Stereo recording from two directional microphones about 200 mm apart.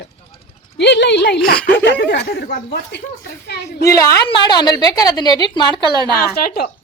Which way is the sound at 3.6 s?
15° left (ahead or behind).